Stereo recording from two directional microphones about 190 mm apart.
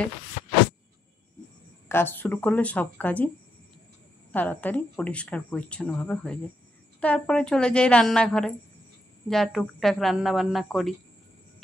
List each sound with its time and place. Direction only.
1.9 s speech: 10° left (ahead or behind)
4.3 s speech: 10° left (ahead or behind)